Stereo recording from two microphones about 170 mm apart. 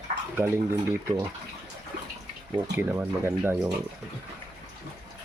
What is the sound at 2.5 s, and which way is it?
Speech, 10° right (ahead or behind).